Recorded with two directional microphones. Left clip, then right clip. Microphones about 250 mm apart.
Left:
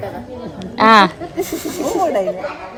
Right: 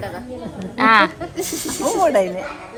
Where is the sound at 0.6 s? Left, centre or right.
Centre.